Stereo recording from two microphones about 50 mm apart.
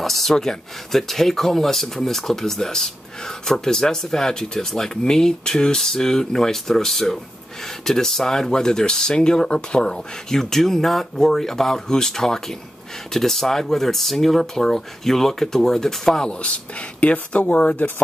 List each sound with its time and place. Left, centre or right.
0.0 s speech: centre
16.3 s speech: left